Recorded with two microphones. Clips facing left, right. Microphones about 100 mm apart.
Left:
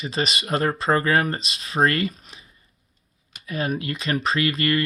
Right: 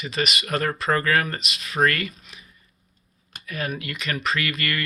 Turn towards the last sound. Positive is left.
turn(degrees=30)  # may be behind; listen again after turning